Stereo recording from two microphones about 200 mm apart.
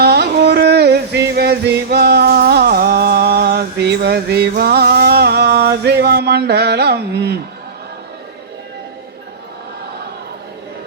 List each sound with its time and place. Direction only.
0.0 s music: 55° right (ahead or behind)